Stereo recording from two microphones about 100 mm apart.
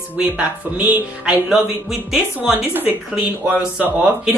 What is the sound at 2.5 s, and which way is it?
A woman's voice, 20° right (ahead or behind).